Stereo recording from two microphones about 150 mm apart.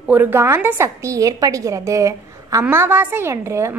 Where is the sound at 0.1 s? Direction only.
15° right (ahead or behind).